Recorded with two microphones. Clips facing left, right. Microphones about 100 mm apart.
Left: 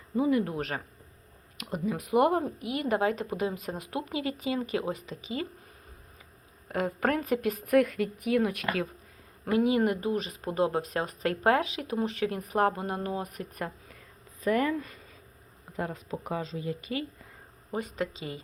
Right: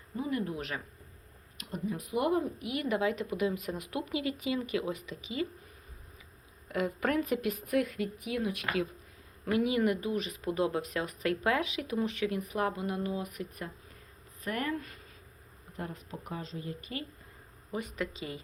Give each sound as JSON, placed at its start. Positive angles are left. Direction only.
{"t": 0.2, "sound": "speech", "side_deg": 90}
{"t": 0.5, "sound": "speech", "side_deg": 45}
{"t": 1.5, "sound": "speech", "side_deg": 90}
{"t": 2.4, "sound": "speech", "side_deg": 30}
{"t": 6.7, "sound": "speech", "side_deg": 40}
{"t": 9.4, "sound": "speech", "side_deg": 30}
{"t": 16.6, "sound": "speech", "side_deg": 90}
{"t": 17.7, "sound": "speech", "side_deg": 35}